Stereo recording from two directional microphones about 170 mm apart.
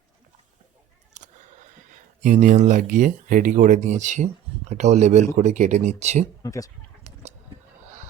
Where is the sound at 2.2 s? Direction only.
50° right (ahead or behind).